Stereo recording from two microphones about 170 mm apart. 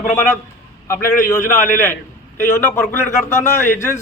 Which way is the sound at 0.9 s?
15° left (ahead or behind).